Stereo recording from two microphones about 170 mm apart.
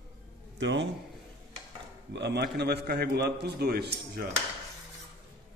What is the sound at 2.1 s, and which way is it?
A man's voice, 80° right.